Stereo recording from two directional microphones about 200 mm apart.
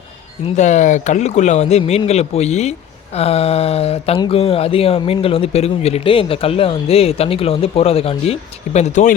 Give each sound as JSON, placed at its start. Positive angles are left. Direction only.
{"t": 0.4, "sound": "speech", "side_deg": 35}